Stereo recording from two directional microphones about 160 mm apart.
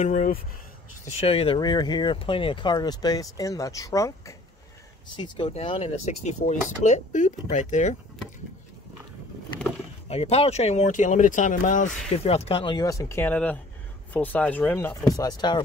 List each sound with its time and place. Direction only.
0.0 s speech: 50° left (ahead or behind)
1.2 s speech: 35° left (ahead or behind)
5.1 s speech: 30° left (ahead or behind); by 7.9 s 50° left (ahead or behind)
10.0 s speech: 40° left (ahead or behind)